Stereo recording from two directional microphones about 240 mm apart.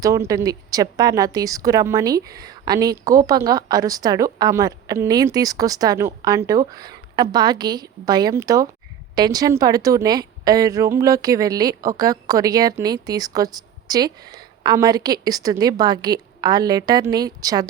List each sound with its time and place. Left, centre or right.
0.0 s a woman's voice: centre